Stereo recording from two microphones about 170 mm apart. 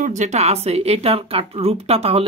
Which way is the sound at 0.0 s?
45° right (ahead or behind).